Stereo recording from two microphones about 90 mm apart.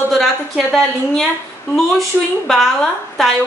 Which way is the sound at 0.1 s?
Centre (ahead or behind).